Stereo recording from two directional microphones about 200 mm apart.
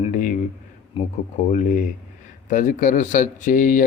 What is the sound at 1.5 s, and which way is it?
Speech, 40° left (ahead or behind).